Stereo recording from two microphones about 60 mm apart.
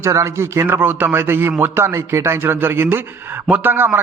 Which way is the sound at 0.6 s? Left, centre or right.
Right.